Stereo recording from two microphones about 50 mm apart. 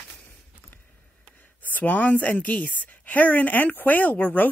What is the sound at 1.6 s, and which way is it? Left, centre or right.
Speech, left.